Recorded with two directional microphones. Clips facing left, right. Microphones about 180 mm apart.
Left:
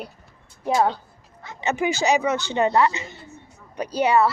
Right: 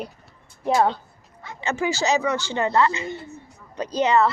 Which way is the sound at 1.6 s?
20° left (ahead or behind).